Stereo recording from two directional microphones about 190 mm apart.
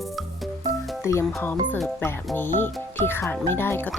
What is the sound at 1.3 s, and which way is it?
Speech, 5° left (ahead or behind).